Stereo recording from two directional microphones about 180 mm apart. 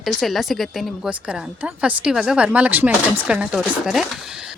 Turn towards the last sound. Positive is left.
turn(degrees=0)  # may be behind; listen again after turning